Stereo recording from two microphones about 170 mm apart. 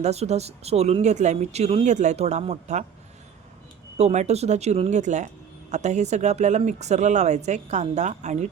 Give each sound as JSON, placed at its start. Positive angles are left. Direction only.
{"t": 0.0, "sound": "speech", "side_deg": -40}
{"t": 3.9, "sound": "speech", "side_deg": -40}